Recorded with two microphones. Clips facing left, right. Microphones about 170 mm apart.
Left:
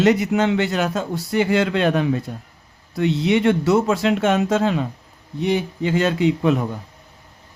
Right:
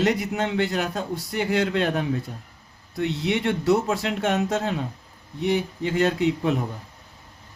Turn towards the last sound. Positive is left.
turn(degrees=90)